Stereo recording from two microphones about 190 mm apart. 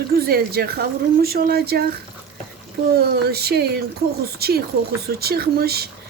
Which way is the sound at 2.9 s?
55° right (ahead or behind).